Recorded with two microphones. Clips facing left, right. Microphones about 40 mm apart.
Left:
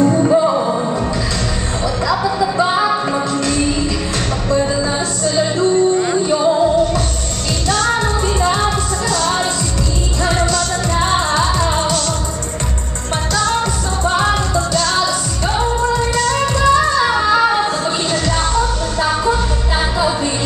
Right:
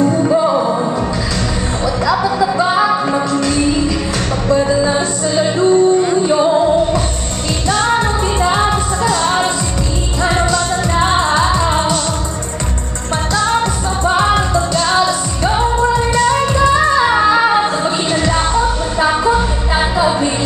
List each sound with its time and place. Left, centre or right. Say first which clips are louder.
0.0 s music: even; centre
2.0 s music: right 3 dB; centre
13.3 s music: right 2 dB; centre